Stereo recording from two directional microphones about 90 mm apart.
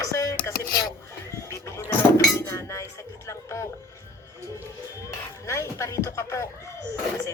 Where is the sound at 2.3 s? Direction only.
35° left (ahead or behind).